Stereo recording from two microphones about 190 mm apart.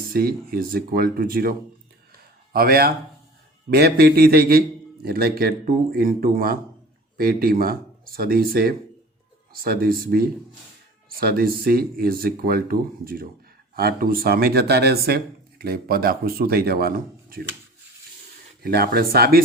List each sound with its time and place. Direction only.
0.1 s a man's voice: 50° right (ahead or behind)
18.6 s speech: 55° right (ahead or behind)